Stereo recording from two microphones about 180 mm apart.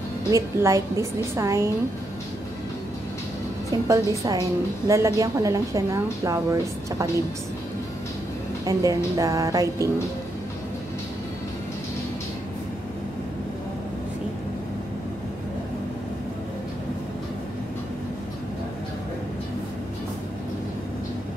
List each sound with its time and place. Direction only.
0.3 s a woman's voice: 20° right (ahead or behind)
3.7 s a woman's voice: 20° right (ahead or behind)
8.6 s a woman's voice: 20° right (ahead or behind)